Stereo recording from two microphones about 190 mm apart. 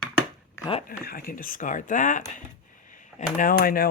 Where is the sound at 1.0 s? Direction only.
50° left (ahead or behind).